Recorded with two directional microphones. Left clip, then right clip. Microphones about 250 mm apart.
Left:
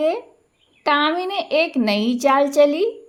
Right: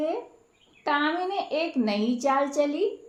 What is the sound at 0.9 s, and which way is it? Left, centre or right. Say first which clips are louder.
Speech: left 7 dB; left.